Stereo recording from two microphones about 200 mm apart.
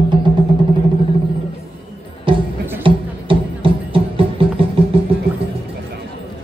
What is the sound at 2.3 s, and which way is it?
Music, 25° right (ahead or behind).